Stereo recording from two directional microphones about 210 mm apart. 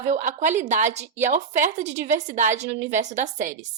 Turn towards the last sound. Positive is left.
turn(degrees=-35)  # may be behind; listen again after turning